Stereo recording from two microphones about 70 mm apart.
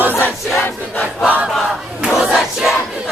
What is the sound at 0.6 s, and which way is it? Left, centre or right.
Battle cry, left.